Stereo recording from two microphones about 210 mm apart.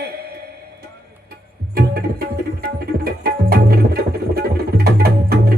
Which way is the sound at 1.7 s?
45° right (ahead or behind).